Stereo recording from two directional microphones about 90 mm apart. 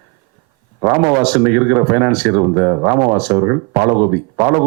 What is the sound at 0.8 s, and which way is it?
Speech, 20° right (ahead or behind).